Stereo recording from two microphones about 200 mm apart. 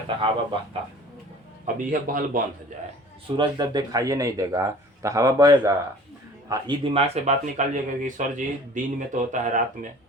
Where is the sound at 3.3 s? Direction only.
20° right (ahead or behind); by 9.6 s 40° right (ahead or behind).